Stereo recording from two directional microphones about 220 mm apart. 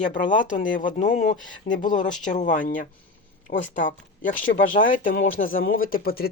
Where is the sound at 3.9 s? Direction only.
35° left (ahead or behind).